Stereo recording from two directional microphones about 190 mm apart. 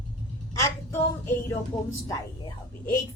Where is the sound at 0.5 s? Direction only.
15° left (ahead or behind).